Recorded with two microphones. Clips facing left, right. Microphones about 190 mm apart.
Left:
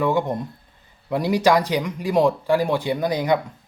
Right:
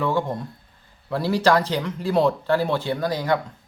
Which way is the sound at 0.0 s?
15° left (ahead or behind).